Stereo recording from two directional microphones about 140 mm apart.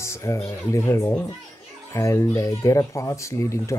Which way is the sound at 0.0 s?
20° left (ahead or behind).